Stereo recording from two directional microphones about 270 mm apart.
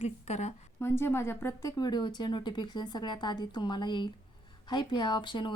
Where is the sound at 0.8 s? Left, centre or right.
Centre.